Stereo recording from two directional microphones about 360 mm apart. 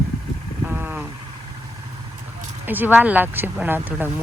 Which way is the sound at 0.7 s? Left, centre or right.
Centre.